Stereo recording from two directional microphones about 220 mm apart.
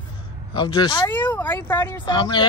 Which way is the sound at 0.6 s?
20° left (ahead or behind).